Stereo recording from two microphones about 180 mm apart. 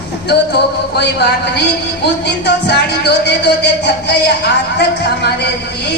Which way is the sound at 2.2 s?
65° left (ahead or behind).